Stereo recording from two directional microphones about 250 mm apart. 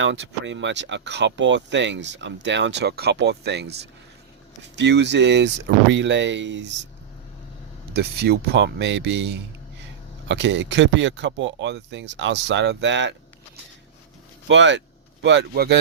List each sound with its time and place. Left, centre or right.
0.0 s speech: right
7.9 s speech: right
14.4 s speech: right